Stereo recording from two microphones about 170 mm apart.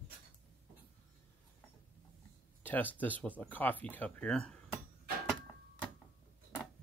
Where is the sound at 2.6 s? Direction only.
10° left (ahead or behind).